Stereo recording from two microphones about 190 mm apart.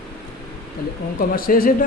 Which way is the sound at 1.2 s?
50° left (ahead or behind).